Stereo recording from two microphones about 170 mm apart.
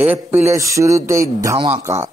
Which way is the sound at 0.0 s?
10° right (ahead or behind).